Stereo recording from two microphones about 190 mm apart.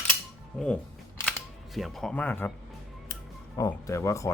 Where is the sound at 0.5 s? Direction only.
5° left (ahead or behind).